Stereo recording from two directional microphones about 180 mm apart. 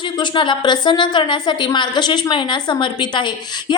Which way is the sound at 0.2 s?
25° left (ahead or behind).